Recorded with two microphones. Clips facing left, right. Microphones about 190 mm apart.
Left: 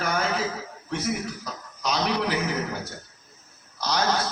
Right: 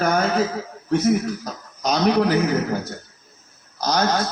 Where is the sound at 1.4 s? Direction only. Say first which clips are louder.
Right 5 dB; 45° right (ahead or behind).